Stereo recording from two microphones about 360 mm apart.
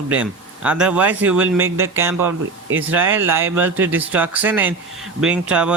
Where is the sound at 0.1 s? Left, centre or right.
Centre.